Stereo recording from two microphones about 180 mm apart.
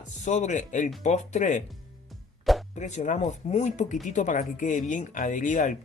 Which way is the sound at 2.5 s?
Centre (ahead or behind).